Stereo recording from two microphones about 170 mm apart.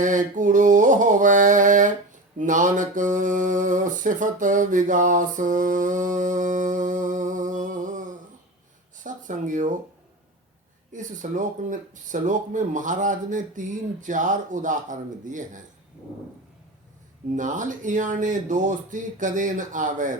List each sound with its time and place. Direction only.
0.0 s speech: 50° right (ahead or behind)
2.4 s mantra: 50° right (ahead or behind)
9.0 s speech: 50° right (ahead or behind)
10.9 s speech: 50° right (ahead or behind)
17.3 s speech: 50° right (ahead or behind)